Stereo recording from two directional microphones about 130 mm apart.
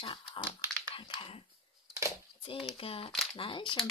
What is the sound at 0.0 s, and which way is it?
Speech, 35° left (ahead or behind).